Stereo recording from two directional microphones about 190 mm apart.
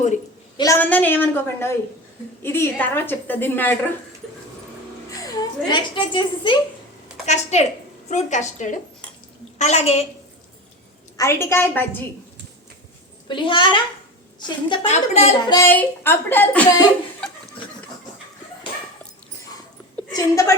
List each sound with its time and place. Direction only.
0.5 s a woman's voice: 15° left (ahead or behind)
5.2 s a woman's voice: 20° left (ahead or behind)
7.3 s a woman's voice: 35° left (ahead or behind)
11.2 s a woman's voice: 15° left (ahead or behind)
13.2 s a woman's voice: 25° left (ahead or behind)
14.8 s a woman's voice: 35° left (ahead or behind)
15.4 s a woman's voice: 15° left (ahead or behind)
20.1 s a woman's voice: 15° left (ahead or behind)